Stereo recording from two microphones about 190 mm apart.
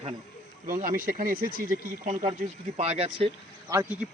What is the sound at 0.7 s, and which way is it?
Speech, 45° right (ahead or behind).